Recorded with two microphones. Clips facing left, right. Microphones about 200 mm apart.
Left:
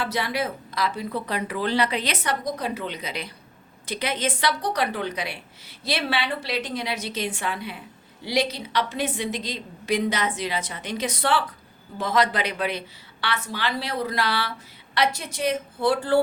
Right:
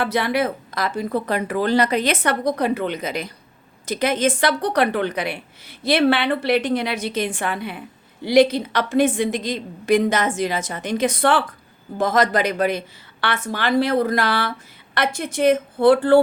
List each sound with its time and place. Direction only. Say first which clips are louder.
0.0 s speech: right 6 dB; 55° right (ahead or behind)